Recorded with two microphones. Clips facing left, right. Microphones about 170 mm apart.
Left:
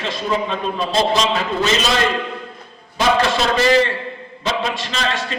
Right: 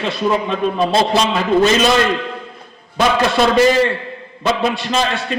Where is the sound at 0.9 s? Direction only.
60° right (ahead or behind).